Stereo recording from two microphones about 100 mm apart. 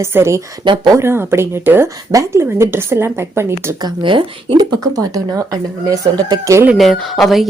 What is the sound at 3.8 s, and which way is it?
Speech, 55° right (ahead or behind).